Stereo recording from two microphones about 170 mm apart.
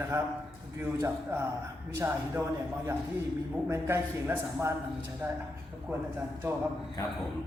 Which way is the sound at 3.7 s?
15° right (ahead or behind).